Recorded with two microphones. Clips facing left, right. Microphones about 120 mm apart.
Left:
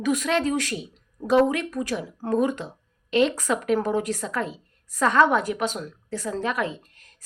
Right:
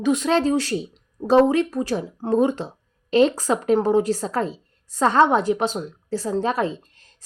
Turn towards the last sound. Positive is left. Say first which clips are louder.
# right 5 dB
turn(degrees=-30)  # may be behind; listen again after turning